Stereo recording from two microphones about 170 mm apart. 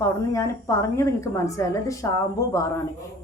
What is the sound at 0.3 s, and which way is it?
A woman's voice, 15° left (ahead or behind).